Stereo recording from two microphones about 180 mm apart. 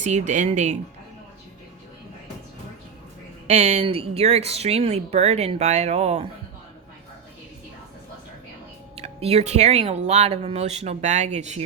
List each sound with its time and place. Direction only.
0.0 s speech: 40° right (ahead or behind)
3.4 s speech: 35° right (ahead or behind)
9.0 s speech: 35° right (ahead or behind)